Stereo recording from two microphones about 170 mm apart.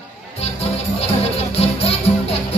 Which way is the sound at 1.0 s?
35° left (ahead or behind).